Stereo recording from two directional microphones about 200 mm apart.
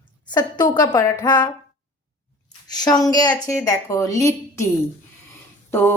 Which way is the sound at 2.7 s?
20° left (ahead or behind).